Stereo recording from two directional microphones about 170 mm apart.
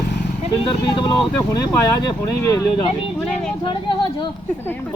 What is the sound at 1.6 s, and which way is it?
Speech, 20° left (ahead or behind).